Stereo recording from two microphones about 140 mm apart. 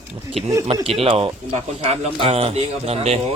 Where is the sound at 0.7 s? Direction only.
45° right (ahead or behind).